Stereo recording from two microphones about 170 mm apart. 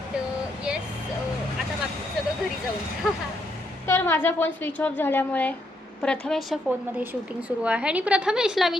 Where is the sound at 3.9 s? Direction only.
15° left (ahead or behind).